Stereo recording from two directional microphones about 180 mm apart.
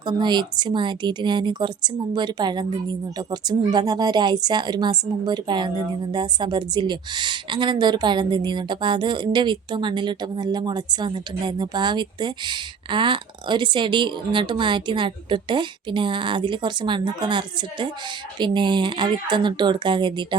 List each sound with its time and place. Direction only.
0.0 s a woman's voice: 25° right (ahead or behind)